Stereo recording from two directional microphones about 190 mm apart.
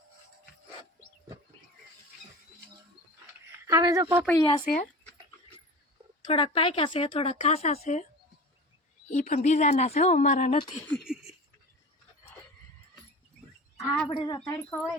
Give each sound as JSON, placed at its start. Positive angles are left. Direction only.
{"t": 3.7, "sound": "a woman's voice", "side_deg": -15}
{"t": 4.4, "sound": "speech", "side_deg": 25}
{"t": 4.6, "sound": "speech", "side_deg": 50}
{"t": 6.2, "sound": "speech", "side_deg": 30}
{"t": 9.0, "sound": "speech", "side_deg": 45}
{"t": 10.9, "sound": "a sound", "side_deg": -5}
{"t": 13.7, "sound": "speech", "side_deg": 5}
{"t": 14.1, "sound": "speech", "side_deg": 20}